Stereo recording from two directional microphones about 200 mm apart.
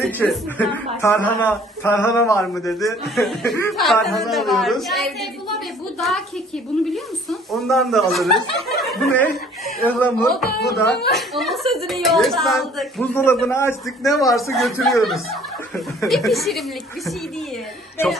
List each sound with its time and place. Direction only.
0.0 s speech: centre (ahead or behind)
3.2 s speech: centre (ahead or behind)
10.5 s speech: 55° left (ahead or behind)
11.1 s speech: centre (ahead or behind)
13.1 s speech: 10° left (ahead or behind)
13.8 s speech: centre (ahead or behind)
16.0 s speech: centre (ahead or behind)